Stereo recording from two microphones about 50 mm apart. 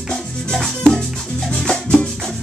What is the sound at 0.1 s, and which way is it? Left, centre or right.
Music, centre.